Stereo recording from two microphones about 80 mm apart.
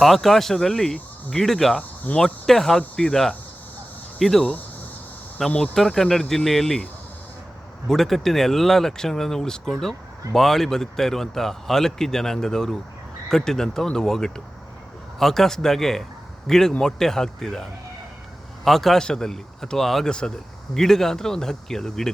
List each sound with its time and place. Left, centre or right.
0.0 s speech: centre
5.5 s speech: centre
5.7 s speech: centre
7.9 s speech: centre